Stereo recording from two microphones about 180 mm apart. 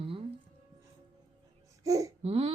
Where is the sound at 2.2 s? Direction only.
30° right (ahead or behind).